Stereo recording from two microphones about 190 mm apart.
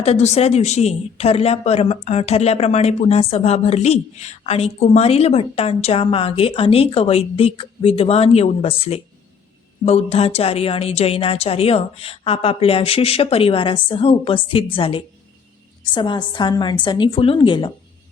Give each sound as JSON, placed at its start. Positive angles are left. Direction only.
{"t": 0.0, "sound": "a woman's voice", "side_deg": 35}